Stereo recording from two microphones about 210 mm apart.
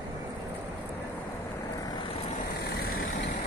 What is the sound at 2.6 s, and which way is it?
Vehicle, 45° left (ahead or behind).